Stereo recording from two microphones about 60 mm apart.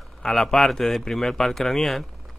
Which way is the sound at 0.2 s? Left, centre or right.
Centre.